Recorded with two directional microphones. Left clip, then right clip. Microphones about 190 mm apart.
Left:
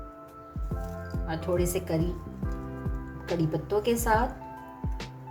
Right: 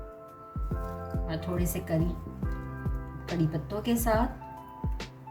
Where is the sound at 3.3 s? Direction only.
Centre (ahead or behind).